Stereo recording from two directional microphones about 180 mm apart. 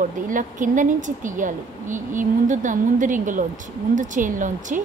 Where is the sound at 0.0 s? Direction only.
45° right (ahead or behind).